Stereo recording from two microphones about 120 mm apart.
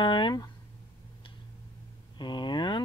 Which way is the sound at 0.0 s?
40° left (ahead or behind).